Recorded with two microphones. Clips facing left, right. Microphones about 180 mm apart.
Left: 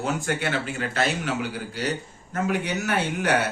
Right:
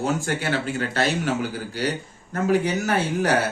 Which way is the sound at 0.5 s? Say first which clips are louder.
Right 3 dB; 35° right (ahead or behind).